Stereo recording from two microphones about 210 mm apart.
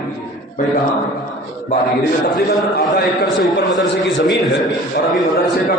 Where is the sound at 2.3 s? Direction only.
50° left (ahead or behind).